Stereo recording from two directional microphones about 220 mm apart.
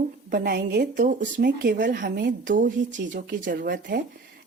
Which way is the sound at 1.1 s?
35° right (ahead or behind).